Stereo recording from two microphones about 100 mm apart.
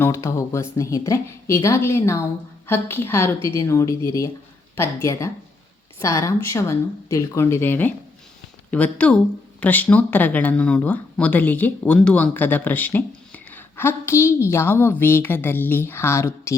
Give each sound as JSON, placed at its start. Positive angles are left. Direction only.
{"t": 0.1, "sound": "a woman's voice", "side_deg": 35}